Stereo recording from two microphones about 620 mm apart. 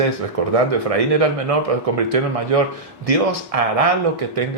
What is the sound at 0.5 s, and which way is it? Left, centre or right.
Speech, right.